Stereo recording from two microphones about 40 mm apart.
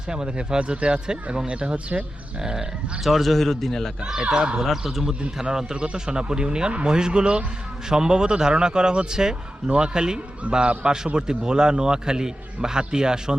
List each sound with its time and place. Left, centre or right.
0.1 s a man's voice: right
2.4 s speech: centre
3.0 s speech: centre
5.4 s a man's voice: centre